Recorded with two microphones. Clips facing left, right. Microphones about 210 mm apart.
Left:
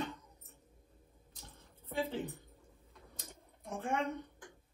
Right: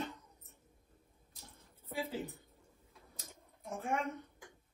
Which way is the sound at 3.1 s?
Centre (ahead or behind).